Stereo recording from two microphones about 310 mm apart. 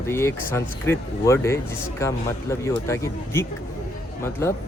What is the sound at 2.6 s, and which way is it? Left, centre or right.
Speech, centre.